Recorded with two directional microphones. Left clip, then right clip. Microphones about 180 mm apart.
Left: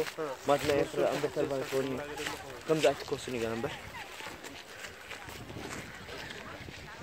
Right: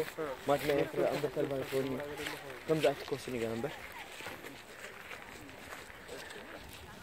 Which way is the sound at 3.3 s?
10° left (ahead or behind).